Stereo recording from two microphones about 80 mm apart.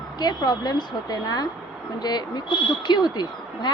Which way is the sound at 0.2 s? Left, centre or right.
Left.